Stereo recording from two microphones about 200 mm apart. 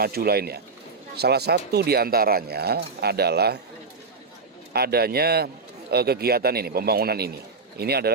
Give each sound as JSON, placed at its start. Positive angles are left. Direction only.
{"t": 0.0, "sound": "speech", "side_deg": -50}
{"t": 4.7, "sound": "speech", "side_deg": -50}